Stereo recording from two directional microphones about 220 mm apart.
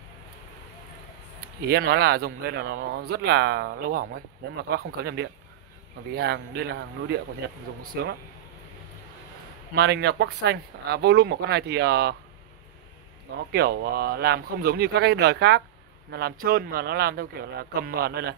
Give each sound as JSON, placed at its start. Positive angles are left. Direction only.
{"t": 1.7, "sound": "speech", "side_deg": -45}
{"t": 9.8, "sound": "speech", "side_deg": -50}
{"t": 13.5, "sound": "speech", "side_deg": -45}